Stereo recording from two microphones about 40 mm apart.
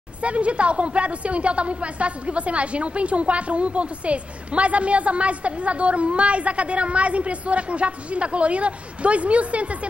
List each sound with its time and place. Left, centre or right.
0.2 s a woman's voice: right